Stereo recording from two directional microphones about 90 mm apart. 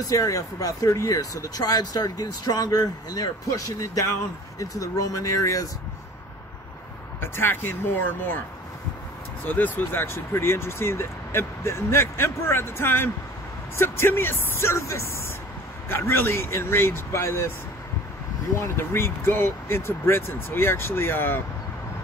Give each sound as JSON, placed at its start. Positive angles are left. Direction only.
{"t": 0.1, "sound": "speech", "side_deg": 40}
{"t": 7.2, "sound": "speech", "side_deg": 25}
{"t": 9.4, "sound": "speech", "side_deg": 20}
{"t": 18.6, "sound": "speech", "side_deg": 30}